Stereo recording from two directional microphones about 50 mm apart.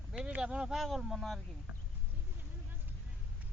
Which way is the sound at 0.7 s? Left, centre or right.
Centre.